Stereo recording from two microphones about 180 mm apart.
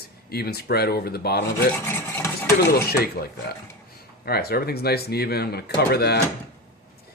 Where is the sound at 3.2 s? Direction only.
50° left (ahead or behind).